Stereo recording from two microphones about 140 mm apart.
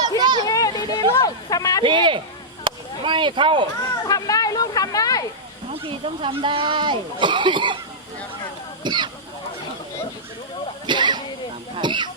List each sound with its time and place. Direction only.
0.2 s a sound: 30° right (ahead or behind)
0.4 s a sound: 25° left (ahead or behind)
1.8 s speech: 35° right (ahead or behind)
2.6 s chop: 35° right (ahead or behind)
4.0 s speech: 25° left (ahead or behind)
5.8 s speech: 35° right (ahead or behind)
8.8 s speech: 30° right (ahead or behind)
10.8 s vehicle: 35° right (ahead or behind)
11.8 s snake: 35° right (ahead or behind)